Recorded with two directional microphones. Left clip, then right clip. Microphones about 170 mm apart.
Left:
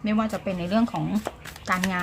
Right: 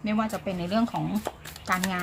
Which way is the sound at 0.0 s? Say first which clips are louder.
Left 2 dB; 15° left (ahead or behind).